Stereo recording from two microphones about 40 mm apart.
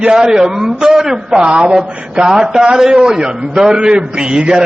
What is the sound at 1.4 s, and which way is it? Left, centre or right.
A man's voice, right.